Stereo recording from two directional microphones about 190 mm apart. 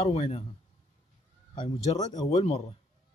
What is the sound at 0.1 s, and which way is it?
Speech, 35° left (ahead or behind).